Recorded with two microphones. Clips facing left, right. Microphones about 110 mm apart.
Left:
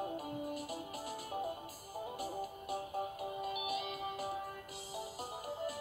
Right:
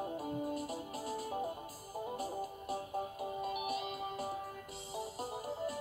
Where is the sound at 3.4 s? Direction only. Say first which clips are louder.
Right 1 dB; 35° right (ahead or behind).